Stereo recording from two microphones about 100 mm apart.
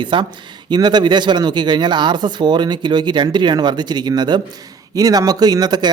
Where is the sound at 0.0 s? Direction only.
50° right (ahead or behind).